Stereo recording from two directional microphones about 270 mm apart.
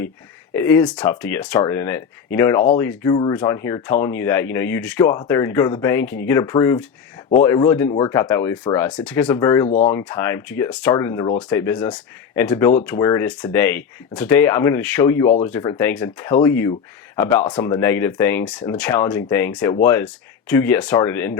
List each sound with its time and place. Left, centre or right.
0.5 s speech: centre
9.6 s speech: left
9.9 s speech: centre